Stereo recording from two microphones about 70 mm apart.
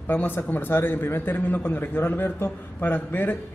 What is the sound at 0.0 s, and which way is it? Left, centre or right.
A man's voice, left.